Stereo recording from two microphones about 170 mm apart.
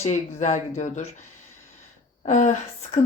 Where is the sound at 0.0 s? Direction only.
45° left (ahead or behind).